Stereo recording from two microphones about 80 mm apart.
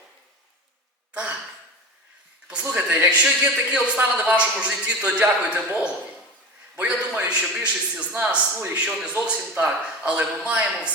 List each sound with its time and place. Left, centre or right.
1.1 s gasp: centre
2.5 s a man's voice: centre